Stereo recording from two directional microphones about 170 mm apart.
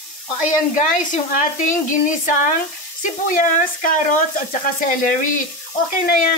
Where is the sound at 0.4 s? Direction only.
45° left (ahead or behind).